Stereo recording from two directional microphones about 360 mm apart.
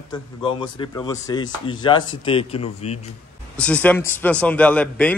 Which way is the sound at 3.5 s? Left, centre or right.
Centre.